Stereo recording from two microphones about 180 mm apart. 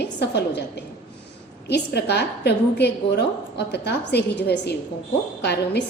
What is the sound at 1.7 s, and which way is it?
A woman's voice, 65° left (ahead or behind).